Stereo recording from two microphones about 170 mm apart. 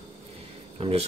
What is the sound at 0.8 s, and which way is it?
Speech, 35° right (ahead or behind).